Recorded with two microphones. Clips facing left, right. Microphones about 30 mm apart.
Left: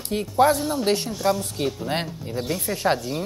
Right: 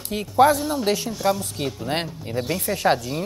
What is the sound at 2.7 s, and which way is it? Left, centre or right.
Speech, centre.